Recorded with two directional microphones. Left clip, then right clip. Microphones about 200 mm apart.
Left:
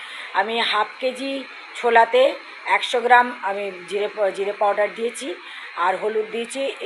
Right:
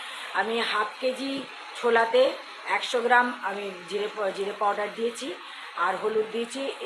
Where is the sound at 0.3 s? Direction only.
15° left (ahead or behind).